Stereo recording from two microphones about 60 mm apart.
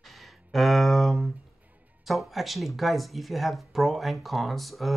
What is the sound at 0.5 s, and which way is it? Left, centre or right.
Speech, centre.